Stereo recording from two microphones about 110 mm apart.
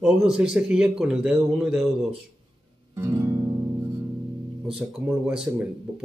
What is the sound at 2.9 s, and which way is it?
Guitar, 25° right (ahead or behind).